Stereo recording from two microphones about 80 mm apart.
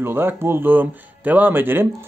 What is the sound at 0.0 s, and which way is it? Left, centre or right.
Speech, right.